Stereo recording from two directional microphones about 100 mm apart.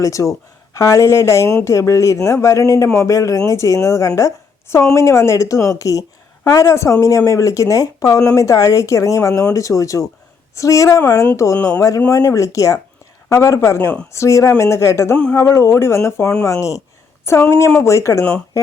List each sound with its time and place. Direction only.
0.0 s speech: 35° left (ahead or behind)
18.2 s speech: 10° left (ahead or behind)